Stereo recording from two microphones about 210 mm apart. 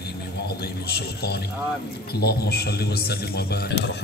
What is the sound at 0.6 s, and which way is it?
A man's voice, 50° left (ahead or behind).